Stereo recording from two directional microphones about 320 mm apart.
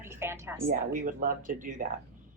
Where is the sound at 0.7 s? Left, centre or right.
Right.